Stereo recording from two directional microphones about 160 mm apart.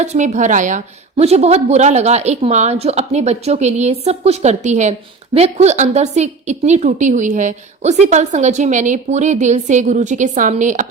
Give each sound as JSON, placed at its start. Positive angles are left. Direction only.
{"t": 0.0, "sound": "a woman's voice", "side_deg": -45}
{"t": 1.1, "sound": "a woman's voice", "side_deg": -40}